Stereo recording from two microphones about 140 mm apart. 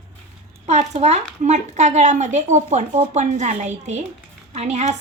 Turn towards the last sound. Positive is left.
turn(degrees=-55)  # may be behind; listen again after turning